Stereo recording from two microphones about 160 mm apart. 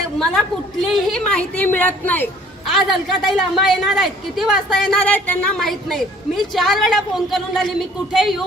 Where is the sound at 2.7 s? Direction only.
Centre (ahead or behind).